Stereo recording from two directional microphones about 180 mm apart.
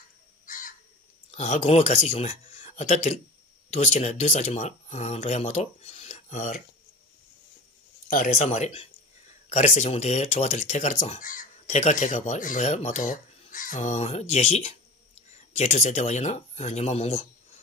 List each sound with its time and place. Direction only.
0.5 s crow: 50° left (ahead or behind)
1.3 s speech: 35° left (ahead or behind)
8.1 s speech: 40° left (ahead or behind)